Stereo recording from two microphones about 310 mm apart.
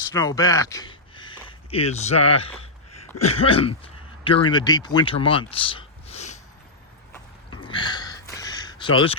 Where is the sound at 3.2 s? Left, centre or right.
Centre.